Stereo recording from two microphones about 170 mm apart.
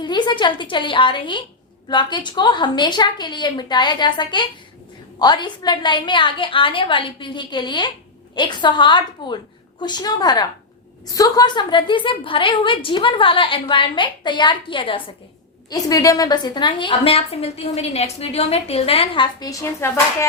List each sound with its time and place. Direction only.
0.0 s a woman's voice: 25° left (ahead or behind)